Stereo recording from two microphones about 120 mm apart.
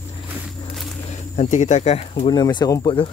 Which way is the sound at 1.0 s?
75° left (ahead or behind).